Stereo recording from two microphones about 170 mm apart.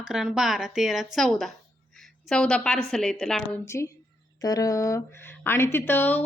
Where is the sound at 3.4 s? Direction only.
15° left (ahead or behind).